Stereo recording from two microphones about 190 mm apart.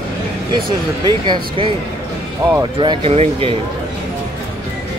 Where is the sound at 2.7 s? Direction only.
25° right (ahead or behind).